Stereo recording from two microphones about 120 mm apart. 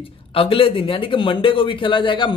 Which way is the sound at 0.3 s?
50° left (ahead or behind).